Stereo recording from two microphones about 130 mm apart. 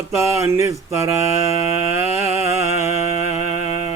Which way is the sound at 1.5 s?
50° left (ahead or behind).